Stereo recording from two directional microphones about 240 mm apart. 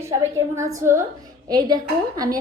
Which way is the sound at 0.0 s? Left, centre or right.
Centre.